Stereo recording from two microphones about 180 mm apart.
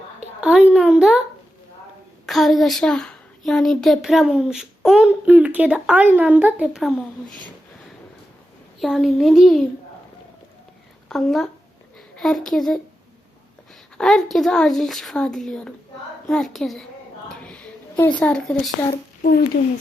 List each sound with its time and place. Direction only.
0.2 s a child's voice: 5° right (ahead or behind)
2.2 s a woman's voice: centre (ahead or behind)
8.8 s a woman's voice: centre (ahead or behind)
11.1 s a woman's voice: centre (ahead or behind)
14.0 s a woman's voice: centre (ahead or behind)
17.4 s a sound: 5° left (ahead or behind)
18.2 s a woman's voice: 5° left (ahead or behind)
19.2 s speech: 60° left (ahead or behind)